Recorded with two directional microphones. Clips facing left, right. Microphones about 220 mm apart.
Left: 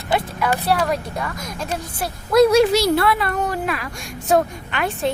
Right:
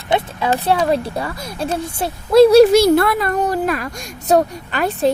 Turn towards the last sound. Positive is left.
turn(degrees=-40)  # may be behind; listen again after turning